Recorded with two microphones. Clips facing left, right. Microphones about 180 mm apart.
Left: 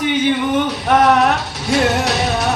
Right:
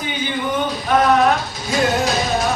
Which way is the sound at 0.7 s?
75° left (ahead or behind).